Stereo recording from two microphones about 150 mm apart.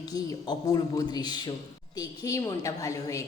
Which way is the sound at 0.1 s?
25° left (ahead or behind).